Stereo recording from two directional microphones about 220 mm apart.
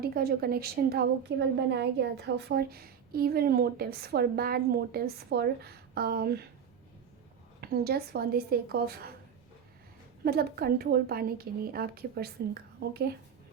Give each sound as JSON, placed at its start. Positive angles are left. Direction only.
{"t": 0.0, "sound": "a woman's voice", "side_deg": -45}
{"t": 7.6, "sound": "a woman's voice", "side_deg": -45}
{"t": 10.2, "sound": "a woman's voice", "side_deg": -45}